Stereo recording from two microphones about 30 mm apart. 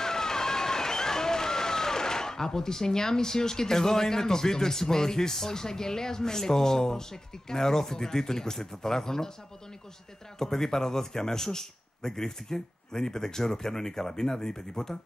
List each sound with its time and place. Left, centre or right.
0.0 s speech: centre
10.4 s a man's voice: centre